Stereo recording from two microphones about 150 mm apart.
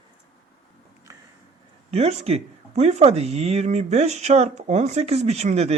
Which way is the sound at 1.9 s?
45° right (ahead or behind).